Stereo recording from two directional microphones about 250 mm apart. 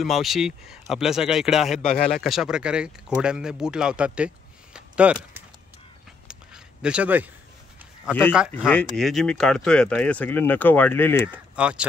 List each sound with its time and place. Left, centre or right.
0.0 s speech: centre
4.7 s a sound: centre
8.1 s speech: centre
11.2 s speech: centre